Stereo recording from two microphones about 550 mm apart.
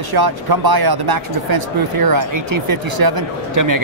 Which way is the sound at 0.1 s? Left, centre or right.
Right.